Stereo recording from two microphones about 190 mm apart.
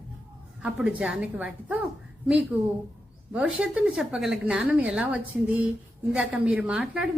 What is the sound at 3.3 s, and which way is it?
A woman's voice, 5° right (ahead or behind).